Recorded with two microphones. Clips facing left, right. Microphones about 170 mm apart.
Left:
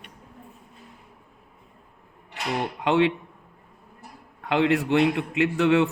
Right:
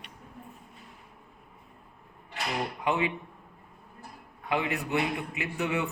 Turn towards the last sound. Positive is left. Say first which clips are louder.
# left 11 dB
turn(degrees=90)